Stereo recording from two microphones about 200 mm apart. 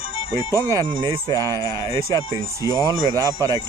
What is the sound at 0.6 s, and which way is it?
Speech, 20° right (ahead or behind).